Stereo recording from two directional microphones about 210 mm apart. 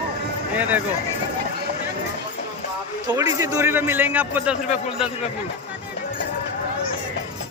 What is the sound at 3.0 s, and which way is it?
A man's voice, 15° right (ahead or behind).